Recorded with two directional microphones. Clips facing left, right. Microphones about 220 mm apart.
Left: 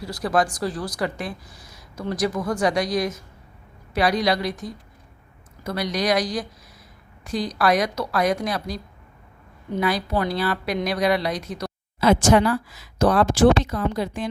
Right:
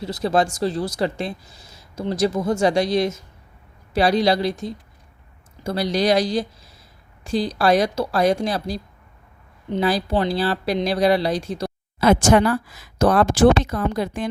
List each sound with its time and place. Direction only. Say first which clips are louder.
0.0 s speech: right 2 dB; 25° right (ahead or behind)
11.9 s speech: right 1 dB; 50° right (ahead or behind)